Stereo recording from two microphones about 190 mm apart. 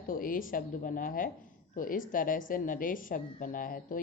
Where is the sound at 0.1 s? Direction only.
45° left (ahead or behind).